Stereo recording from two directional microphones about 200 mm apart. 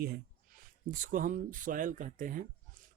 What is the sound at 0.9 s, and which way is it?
Speech, 40° right (ahead or behind).